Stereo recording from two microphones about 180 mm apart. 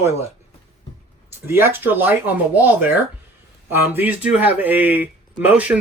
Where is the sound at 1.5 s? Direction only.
15° right (ahead or behind).